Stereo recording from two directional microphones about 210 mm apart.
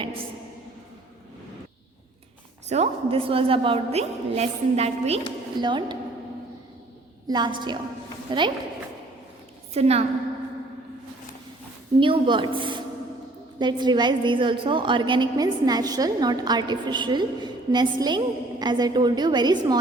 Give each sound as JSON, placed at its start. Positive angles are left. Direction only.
{"t": 2.6, "sound": "a woman's voice", "side_deg": -30}
{"t": 7.3, "sound": "a woman's voice", "side_deg": -20}
{"t": 9.7, "sound": "a woman's voice", "side_deg": -30}
{"t": 11.9, "sound": "a woman's voice", "side_deg": -25}